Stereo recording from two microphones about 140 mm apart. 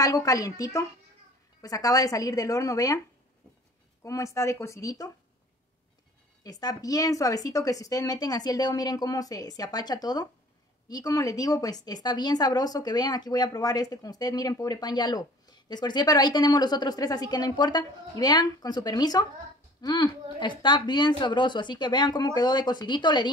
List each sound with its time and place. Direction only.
0.0 s speech: 25° left (ahead or behind)
4.0 s speech: 20° left (ahead or behind)
6.4 s speech: 25° left (ahead or behind)